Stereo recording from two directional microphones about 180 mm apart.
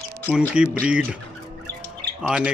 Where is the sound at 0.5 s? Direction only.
5° right (ahead or behind).